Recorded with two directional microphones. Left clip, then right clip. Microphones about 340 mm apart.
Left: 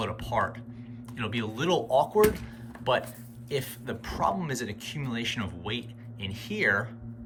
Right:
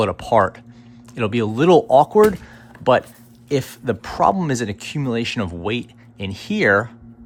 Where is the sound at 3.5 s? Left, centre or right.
Centre.